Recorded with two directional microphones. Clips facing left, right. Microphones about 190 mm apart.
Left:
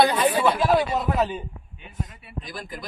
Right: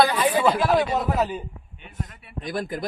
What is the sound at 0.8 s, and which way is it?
A man's voice, centre (ahead or behind).